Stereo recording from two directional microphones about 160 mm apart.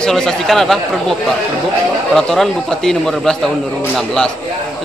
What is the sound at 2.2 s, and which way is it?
A man's voice, 5° left (ahead or behind).